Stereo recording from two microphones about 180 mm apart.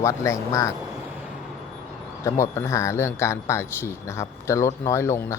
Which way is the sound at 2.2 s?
15° left (ahead or behind).